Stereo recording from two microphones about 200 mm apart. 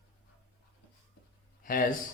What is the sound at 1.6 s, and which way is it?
Speech, 45° left (ahead or behind).